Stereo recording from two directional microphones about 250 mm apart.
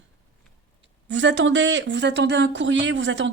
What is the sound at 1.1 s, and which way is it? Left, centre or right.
Speech, right.